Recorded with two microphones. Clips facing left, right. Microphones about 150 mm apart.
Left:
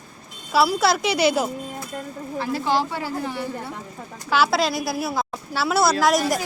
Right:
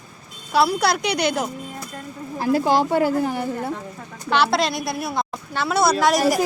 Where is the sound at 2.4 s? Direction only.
45° right (ahead or behind).